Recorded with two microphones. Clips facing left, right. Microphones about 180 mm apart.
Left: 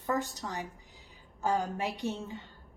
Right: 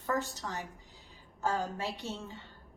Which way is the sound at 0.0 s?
15° left (ahead or behind).